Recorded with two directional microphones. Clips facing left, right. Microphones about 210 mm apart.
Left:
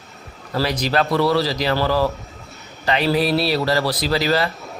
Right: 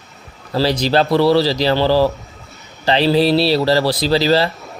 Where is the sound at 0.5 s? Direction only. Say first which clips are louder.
Right 5 dB; 30° right (ahead or behind).